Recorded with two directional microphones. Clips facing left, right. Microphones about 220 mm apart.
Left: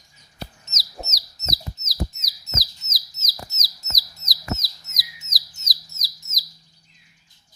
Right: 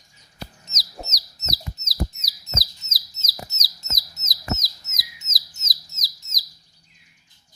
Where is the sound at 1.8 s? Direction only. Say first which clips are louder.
Right 1 dB; 30° right (ahead or behind).